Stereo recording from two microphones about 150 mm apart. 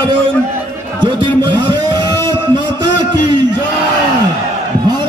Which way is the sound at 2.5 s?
30° right (ahead or behind).